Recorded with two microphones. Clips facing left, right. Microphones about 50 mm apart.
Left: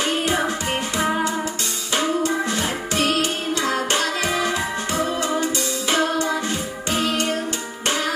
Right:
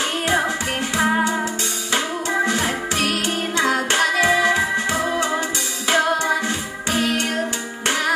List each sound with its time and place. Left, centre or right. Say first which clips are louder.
0.9 s music: right 4 dB; right
2.4 s music: right 3 dB; right
3.0 s music: left 4 dB; left
3.5 s music: right 4 dB; right